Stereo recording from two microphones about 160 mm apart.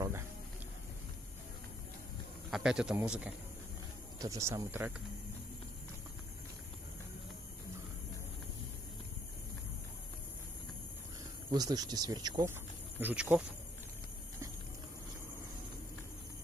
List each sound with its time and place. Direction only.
2.5 s a man's voice: 5° right (ahead or behind)
4.2 s speech: 20° right (ahead or behind)
11.5 s speech: 25° right (ahead or behind)
13.0 s speech: 10° right (ahead or behind)